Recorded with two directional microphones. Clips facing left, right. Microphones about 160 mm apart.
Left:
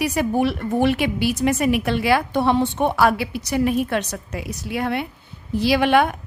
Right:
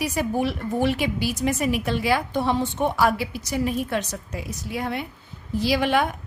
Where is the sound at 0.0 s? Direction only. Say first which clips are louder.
Left 4 dB; 65° left (ahead or behind).